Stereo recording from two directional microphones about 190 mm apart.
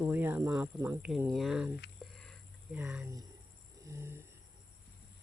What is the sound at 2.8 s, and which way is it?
Speech, 10° right (ahead or behind).